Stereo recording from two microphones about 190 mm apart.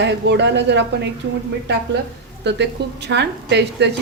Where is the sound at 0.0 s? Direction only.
65° right (ahead or behind).